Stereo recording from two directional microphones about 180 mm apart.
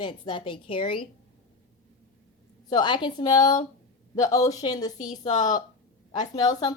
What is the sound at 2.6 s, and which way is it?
A woman's voice, 25° left (ahead or behind).